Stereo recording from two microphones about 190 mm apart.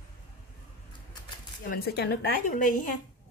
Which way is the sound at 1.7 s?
55° left (ahead or behind).